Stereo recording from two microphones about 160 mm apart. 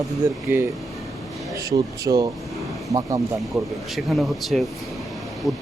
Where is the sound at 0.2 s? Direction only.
10° right (ahead or behind).